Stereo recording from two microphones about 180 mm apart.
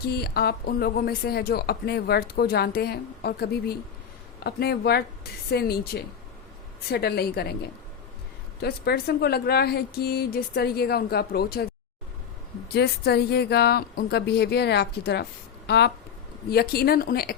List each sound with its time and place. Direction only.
0.0 s speech: 60° left (ahead or behind)
12.7 s speech: 65° left (ahead or behind)